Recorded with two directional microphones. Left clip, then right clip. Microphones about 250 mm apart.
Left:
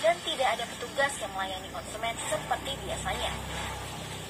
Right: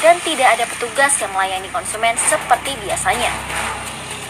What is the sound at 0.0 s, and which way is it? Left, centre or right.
A woman's voice, right.